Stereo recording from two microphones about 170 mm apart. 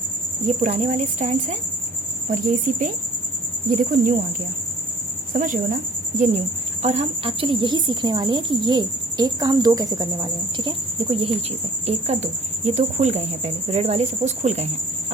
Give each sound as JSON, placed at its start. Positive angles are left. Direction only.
{"t": 0.4, "sound": "speech", "side_deg": -45}
{"t": 5.3, "sound": "a woman's voice", "side_deg": -50}